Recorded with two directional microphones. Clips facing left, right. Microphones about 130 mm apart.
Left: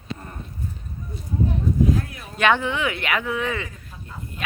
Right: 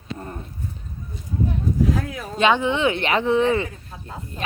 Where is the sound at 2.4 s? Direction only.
20° right (ahead or behind).